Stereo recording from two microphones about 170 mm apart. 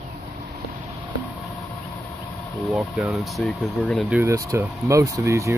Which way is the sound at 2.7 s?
5° right (ahead or behind).